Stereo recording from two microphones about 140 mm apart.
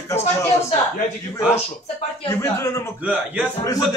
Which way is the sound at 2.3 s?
20° left (ahead or behind).